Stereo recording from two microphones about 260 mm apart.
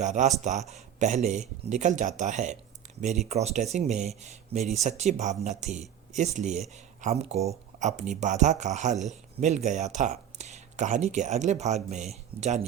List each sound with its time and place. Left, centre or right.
0.0 s speech: right